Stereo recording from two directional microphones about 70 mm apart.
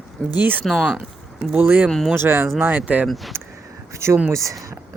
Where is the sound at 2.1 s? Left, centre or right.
Right.